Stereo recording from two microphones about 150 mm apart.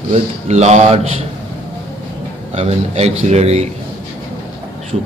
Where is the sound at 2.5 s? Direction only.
45° right (ahead or behind).